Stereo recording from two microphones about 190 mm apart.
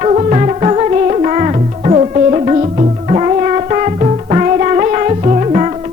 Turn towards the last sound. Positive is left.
turn(degrees=-30)  # may be behind; listen again after turning